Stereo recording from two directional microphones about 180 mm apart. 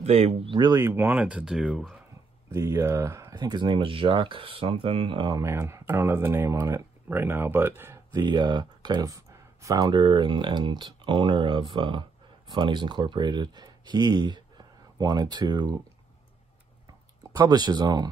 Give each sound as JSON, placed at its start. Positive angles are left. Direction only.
{"t": 0.0, "sound": "speech", "side_deg": -35}
{"t": 0.8, "sound": "speech", "side_deg": -10}
{"t": 2.5, "sound": "speech", "side_deg": -20}
{"t": 8.1, "sound": "speech", "side_deg": -25}
{"t": 17.3, "sound": "speech", "side_deg": -25}